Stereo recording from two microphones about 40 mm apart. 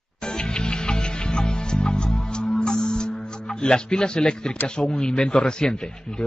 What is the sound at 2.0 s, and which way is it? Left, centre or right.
Speech, centre.